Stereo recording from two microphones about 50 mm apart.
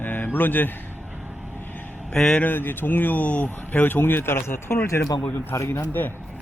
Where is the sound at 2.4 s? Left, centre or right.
Left.